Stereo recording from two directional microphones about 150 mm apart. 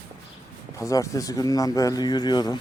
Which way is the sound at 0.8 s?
20° left (ahead or behind).